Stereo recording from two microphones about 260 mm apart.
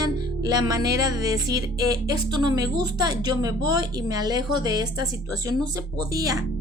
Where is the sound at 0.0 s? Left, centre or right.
Centre.